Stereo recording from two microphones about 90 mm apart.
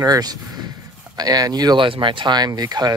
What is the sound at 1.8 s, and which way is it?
Speech, 70° right (ahead or behind).